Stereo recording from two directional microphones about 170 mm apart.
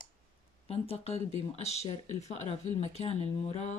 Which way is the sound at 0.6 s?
35° left (ahead or behind).